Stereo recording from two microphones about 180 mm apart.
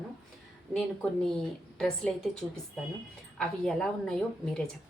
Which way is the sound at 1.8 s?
5° left (ahead or behind).